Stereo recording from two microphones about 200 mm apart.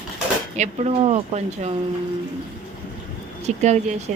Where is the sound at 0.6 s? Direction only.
30° right (ahead or behind).